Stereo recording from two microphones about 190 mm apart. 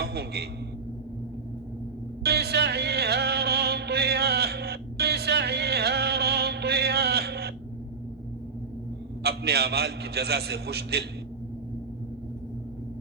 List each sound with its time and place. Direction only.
0.0 s a man's voice: 60° right (ahead or behind)
2.2 s music: 55° right (ahead or behind)
9.2 s a man's voice: 55° right (ahead or behind)